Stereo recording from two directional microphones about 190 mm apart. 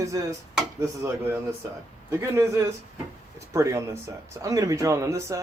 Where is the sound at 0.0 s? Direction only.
15° right (ahead or behind).